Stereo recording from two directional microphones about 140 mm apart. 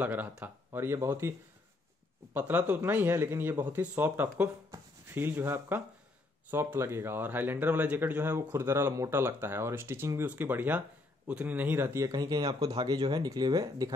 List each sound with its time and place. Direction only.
0.0 s speech: 10° right (ahead or behind)
2.3 s a man's voice: 10° right (ahead or behind); by 13.9 s 30° right (ahead or behind)